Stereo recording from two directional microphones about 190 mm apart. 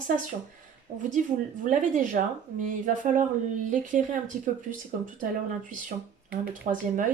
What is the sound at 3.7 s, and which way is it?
Speech, 45° right (ahead or behind).